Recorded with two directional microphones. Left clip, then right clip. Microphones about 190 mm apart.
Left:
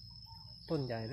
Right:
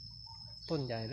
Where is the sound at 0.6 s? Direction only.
5° right (ahead or behind).